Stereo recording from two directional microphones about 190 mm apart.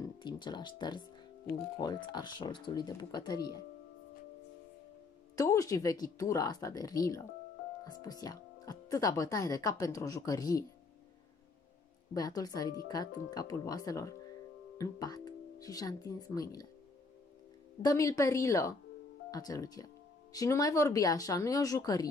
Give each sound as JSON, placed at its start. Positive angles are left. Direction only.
{"t": 0.0, "sound": "speech", "side_deg": 20}
{"t": 5.3, "sound": "speech", "side_deg": 15}
{"t": 12.1, "sound": "speech", "side_deg": 20}
{"t": 17.8, "sound": "speech", "side_deg": 15}